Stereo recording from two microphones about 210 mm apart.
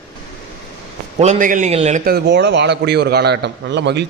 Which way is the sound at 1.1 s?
35° right (ahead or behind).